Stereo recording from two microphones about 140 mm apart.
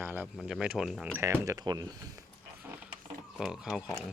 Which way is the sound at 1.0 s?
15° right (ahead or behind).